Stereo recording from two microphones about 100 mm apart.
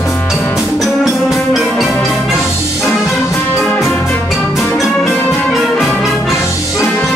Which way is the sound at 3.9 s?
20° left (ahead or behind).